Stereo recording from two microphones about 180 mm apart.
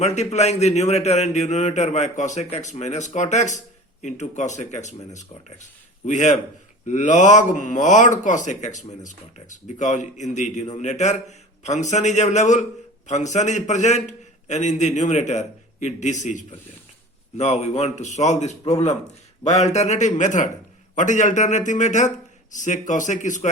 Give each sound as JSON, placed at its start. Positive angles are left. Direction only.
{"t": 0.0, "sound": "a man's voice", "side_deg": 40}